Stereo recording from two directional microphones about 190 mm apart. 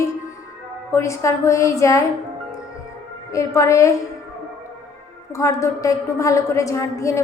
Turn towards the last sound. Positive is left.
turn(degrees=15)  # may be behind; listen again after turning